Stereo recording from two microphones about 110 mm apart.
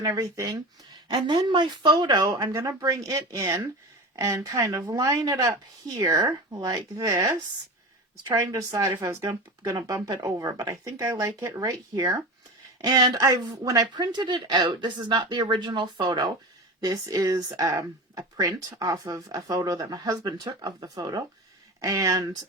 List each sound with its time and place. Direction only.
0.0 s speech: 30° right (ahead or behind)